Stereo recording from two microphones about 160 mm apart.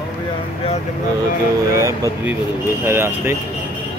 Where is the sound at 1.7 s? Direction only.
20° right (ahead or behind).